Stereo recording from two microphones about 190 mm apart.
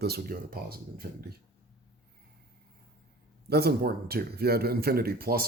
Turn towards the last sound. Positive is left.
turn(degrees=-55)  # may be behind; listen again after turning